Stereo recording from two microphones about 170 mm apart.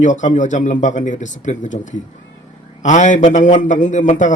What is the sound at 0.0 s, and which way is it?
A man's voice, 45° left (ahead or behind).